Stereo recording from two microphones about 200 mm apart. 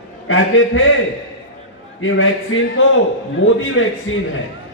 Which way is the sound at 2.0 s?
80° left.